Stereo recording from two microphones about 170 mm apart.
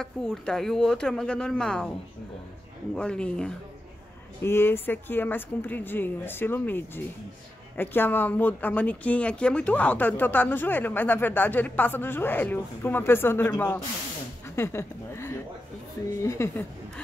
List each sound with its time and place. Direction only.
0.0 s speech: centre (ahead or behind)
2.9 s speech: 5° left (ahead or behind)